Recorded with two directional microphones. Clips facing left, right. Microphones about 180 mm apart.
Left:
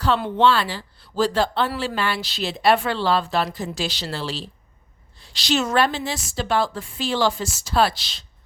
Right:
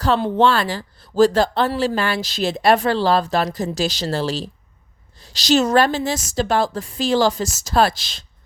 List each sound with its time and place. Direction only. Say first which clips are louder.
0.0 s a woman's voice: right 2 dB; 40° right (ahead or behind)